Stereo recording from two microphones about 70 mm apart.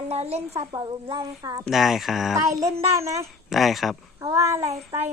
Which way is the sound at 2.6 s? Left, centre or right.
Right.